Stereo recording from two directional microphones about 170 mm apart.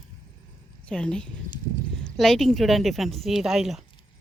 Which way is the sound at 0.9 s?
5° left (ahead or behind).